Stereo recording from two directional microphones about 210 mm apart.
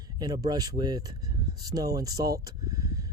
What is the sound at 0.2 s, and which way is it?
Speech, 20° right (ahead or behind).